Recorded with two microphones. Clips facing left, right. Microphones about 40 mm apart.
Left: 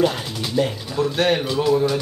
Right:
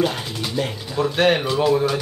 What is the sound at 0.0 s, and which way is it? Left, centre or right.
Speech, centre.